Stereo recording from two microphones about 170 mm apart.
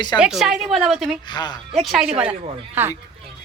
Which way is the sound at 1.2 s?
25° left (ahead or behind).